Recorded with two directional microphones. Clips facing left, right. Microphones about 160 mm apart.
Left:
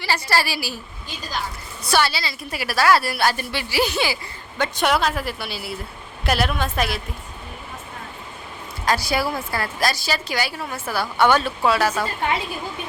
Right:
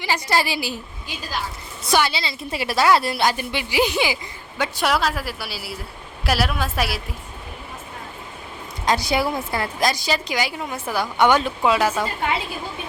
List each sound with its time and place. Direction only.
0.0 s a woman's voice: 20° right (ahead or behind)
1.8 s a woman's voice: 20° right (ahead or behind)
8.8 s a woman's voice: 20° right (ahead or behind)